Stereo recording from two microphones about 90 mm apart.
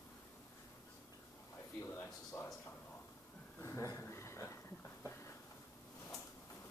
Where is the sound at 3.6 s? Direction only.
35° left (ahead or behind).